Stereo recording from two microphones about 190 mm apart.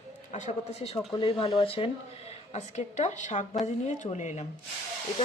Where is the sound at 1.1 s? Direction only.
25° left (ahead or behind).